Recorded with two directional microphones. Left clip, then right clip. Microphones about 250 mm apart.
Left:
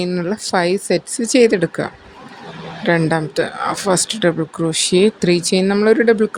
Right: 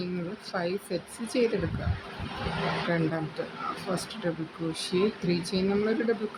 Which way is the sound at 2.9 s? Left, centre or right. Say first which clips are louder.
Left 13 dB; left.